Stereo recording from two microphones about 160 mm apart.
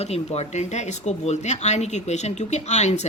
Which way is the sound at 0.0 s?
40° left (ahead or behind).